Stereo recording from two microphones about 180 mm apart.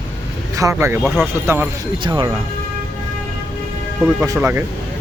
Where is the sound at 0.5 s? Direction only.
15° right (ahead or behind).